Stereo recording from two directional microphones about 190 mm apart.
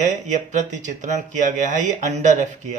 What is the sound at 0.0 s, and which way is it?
Speech, 40° right (ahead or behind).